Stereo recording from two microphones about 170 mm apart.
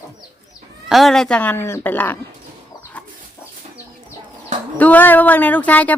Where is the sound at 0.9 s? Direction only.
Centre (ahead or behind).